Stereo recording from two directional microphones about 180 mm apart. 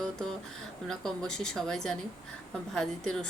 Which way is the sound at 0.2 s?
5° left (ahead or behind).